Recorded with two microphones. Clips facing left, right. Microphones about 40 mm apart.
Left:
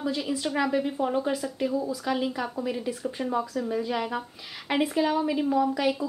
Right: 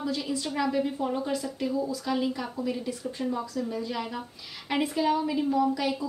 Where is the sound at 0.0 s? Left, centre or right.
Centre.